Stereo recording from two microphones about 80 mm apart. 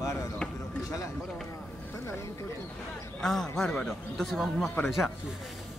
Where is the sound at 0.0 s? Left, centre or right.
Left.